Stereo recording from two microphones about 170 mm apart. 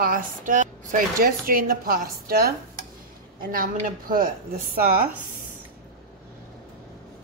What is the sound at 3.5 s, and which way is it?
A woman's voice, 55° right (ahead or behind).